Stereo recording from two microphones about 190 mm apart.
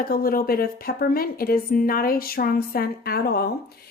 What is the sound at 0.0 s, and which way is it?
A woman's voice, 50° left (ahead or behind).